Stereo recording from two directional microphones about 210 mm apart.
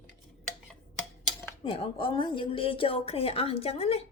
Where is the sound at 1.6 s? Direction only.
25° left (ahead or behind).